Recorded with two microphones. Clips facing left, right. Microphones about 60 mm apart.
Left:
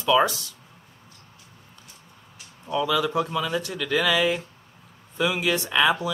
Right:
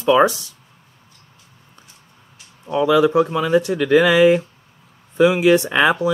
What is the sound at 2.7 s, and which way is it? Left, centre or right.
Speech, right.